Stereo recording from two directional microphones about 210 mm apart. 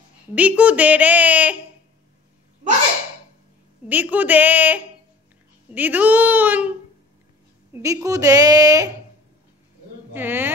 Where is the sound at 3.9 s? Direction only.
10° right (ahead or behind).